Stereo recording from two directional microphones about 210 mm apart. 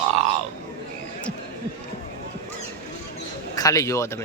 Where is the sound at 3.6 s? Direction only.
15° left (ahead or behind).